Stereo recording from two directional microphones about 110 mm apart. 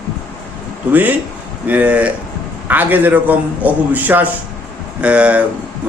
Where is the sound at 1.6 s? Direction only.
15° right (ahead or behind).